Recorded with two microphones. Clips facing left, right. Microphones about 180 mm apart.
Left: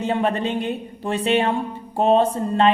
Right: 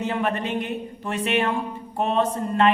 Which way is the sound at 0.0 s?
30° left (ahead or behind).